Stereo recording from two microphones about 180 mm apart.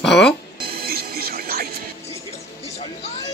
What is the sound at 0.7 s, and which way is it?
Music, 60° right (ahead or behind).